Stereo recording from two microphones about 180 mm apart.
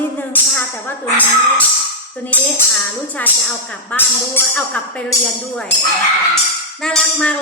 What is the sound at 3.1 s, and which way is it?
Speech, 10° left (ahead or behind).